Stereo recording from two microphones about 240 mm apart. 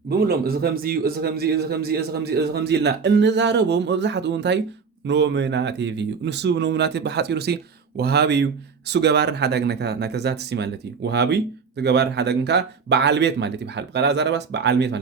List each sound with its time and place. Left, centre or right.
0.1 s a man's voice: right